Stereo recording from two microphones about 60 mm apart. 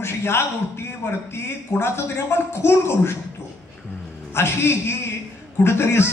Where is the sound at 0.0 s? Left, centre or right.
Left.